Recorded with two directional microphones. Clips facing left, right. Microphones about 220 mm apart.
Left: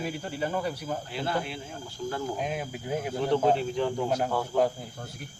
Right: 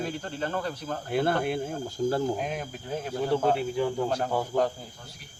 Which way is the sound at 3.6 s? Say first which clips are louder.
Right 1 dB; 5° right (ahead or behind).